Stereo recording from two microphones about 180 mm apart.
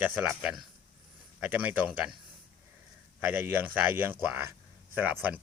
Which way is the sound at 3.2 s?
10° right (ahead or behind).